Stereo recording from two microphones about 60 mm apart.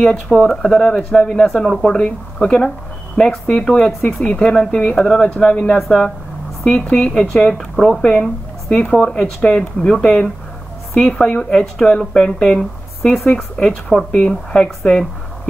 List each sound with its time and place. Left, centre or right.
0.0 s speech: centre
6.9 s speech: centre
7.5 s speech: centre